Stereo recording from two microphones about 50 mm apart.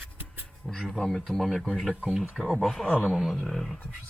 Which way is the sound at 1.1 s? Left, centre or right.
Centre.